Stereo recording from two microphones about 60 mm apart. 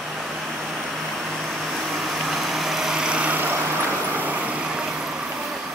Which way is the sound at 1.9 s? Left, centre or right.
Centre.